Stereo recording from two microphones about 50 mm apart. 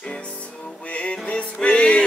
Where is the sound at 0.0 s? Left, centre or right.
Left.